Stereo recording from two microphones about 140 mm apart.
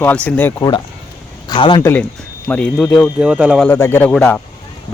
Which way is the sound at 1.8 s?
15° left (ahead or behind).